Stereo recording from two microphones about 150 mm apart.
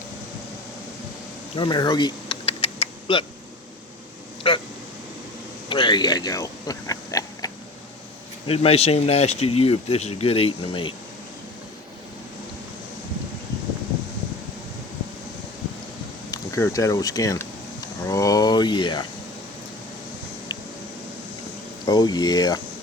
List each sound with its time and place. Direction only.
1.5 s typing: 30° left (ahead or behind)
4.4 s speech: 35° left (ahead or behind)
5.6 s speech: 35° left (ahead or behind)
8.4 s speech: 40° left (ahead or behind)
16.3 s speech: 20° left (ahead or behind)
21.8 s speech: 25° left (ahead or behind)